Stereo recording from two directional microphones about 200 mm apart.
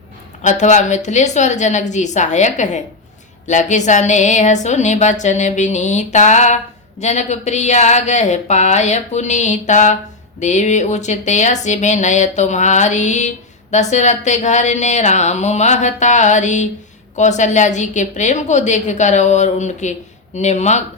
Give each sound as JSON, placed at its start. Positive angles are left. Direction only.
{"t": 0.4, "sound": "speech", "side_deg": 35}